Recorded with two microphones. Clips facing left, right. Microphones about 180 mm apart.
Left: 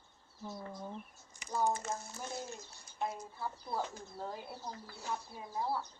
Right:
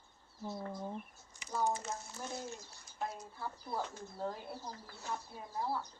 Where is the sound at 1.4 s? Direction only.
55° left (ahead or behind).